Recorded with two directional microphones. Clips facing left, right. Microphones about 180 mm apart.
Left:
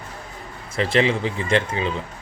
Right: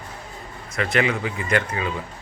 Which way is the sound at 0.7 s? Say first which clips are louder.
Left 3 dB; 30° left (ahead or behind).